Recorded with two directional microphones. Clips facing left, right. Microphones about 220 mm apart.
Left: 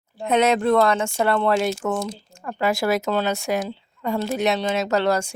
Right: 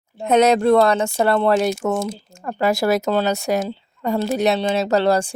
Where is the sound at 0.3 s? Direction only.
40° right (ahead or behind).